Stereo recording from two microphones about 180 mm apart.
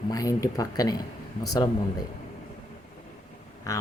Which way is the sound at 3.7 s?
20° left (ahead or behind).